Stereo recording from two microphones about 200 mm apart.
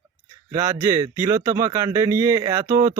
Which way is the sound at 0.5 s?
15° right (ahead or behind).